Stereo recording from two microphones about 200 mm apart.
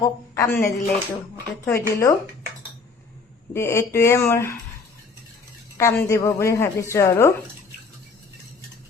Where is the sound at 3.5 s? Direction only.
10° left (ahead or behind).